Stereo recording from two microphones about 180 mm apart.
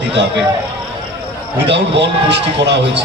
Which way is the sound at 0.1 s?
80° right.